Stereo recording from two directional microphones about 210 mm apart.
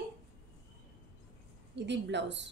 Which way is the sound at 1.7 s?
55° right (ahead or behind).